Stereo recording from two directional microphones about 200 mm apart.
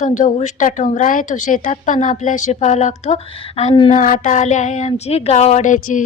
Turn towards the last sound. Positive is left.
turn(degrees=40)  # may be behind; listen again after turning